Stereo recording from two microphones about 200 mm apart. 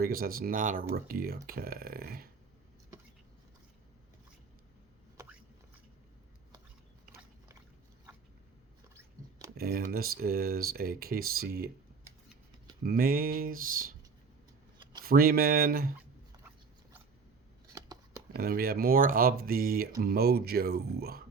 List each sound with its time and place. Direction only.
0.0 s speech: 45° right (ahead or behind)
9.6 s speech: 50° right (ahead or behind)
12.8 s speech: 45° right (ahead or behind)
15.0 s speech: 50° right (ahead or behind)
17.7 s scissors: 15° right (ahead or behind)
18.3 s speech: 50° right (ahead or behind)